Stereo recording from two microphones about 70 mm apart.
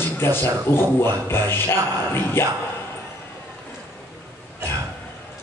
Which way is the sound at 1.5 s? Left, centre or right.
Left.